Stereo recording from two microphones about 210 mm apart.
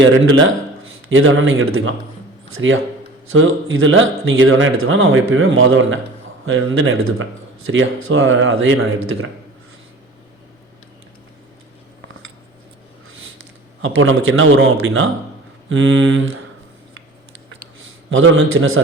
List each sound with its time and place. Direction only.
0.0 s a man's voice: 65° right (ahead or behind)
13.8 s a man's voice: 70° right (ahead or behind)
18.1 s speech: 70° right (ahead or behind)